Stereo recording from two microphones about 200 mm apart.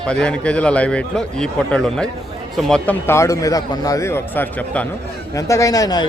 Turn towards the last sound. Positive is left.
turn(degrees=20)  # may be behind; listen again after turning